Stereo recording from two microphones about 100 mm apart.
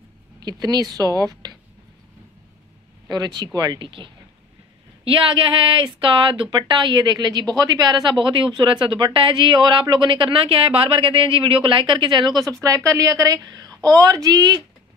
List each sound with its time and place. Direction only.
0.4 s speech: 45° right (ahead or behind)
3.1 s a woman's voice: 45° right (ahead or behind)